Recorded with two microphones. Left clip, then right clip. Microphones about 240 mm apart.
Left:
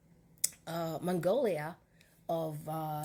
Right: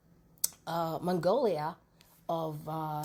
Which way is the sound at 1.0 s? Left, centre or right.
Right.